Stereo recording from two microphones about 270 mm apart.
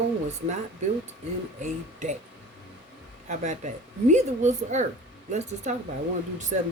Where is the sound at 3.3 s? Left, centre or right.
Right.